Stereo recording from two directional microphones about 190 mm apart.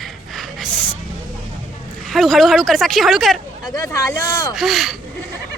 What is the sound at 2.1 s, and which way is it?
A woman's voice, centre (ahead or behind).